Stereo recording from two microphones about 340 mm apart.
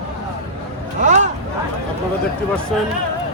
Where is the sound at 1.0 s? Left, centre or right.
Right.